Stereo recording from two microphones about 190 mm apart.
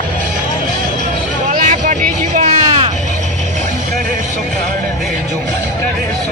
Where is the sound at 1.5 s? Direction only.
40° right (ahead or behind).